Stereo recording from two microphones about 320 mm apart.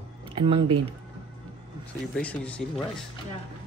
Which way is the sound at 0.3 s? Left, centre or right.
Centre.